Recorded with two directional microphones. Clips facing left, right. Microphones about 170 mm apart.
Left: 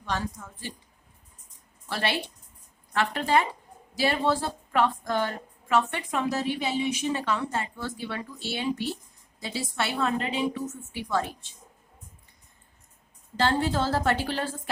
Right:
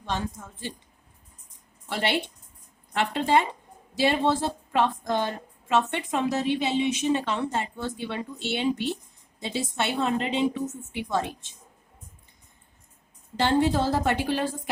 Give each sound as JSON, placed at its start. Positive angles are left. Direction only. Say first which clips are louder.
{"t": 0.0, "sound": "a woman's voice", "louder": "right 1 dB", "side_deg": -25}
{"t": 1.9, "sound": "a woman's voice", "louder": "right 2 dB", "side_deg": -20}
{"t": 13.4, "sound": "a woman's voice", "louder": "right 3 dB", "side_deg": -20}